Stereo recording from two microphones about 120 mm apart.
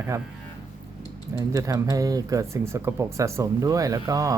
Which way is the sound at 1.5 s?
30° right (ahead or behind).